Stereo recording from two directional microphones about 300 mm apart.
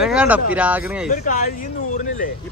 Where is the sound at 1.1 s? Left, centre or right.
Left.